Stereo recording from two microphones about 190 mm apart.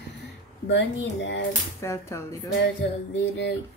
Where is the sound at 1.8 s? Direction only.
15° left (ahead or behind).